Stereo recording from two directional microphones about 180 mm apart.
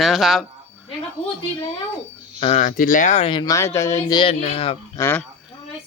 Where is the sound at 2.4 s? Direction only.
40° left (ahead or behind).